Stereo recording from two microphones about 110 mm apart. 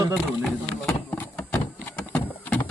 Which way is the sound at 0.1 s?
5° left (ahead or behind).